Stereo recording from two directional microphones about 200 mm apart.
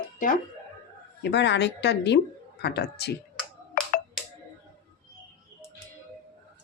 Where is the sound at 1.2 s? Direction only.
60° left (ahead or behind).